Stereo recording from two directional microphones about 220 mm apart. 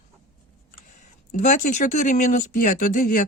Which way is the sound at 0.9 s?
35° left (ahead or behind).